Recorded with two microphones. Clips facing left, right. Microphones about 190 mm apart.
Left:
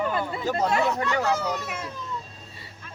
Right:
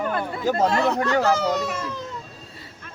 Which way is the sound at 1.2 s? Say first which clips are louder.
Right 5 dB; 90° right.